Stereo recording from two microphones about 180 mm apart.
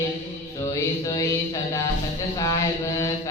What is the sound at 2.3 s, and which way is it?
Mantra, 20° left (ahead or behind).